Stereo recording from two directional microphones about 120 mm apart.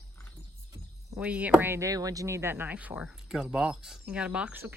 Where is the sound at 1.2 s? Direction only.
10° right (ahead or behind).